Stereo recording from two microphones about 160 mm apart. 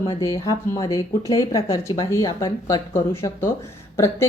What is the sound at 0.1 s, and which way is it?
A woman's voice, 20° left (ahead or behind).